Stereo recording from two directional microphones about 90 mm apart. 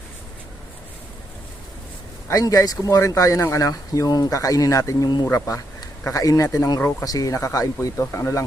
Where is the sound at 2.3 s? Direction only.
40° left (ahead or behind).